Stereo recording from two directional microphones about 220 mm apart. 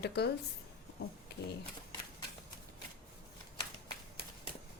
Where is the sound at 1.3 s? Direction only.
50° left (ahead or behind).